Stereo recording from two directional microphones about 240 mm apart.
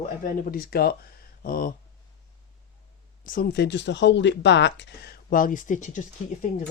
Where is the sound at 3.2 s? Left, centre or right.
Left.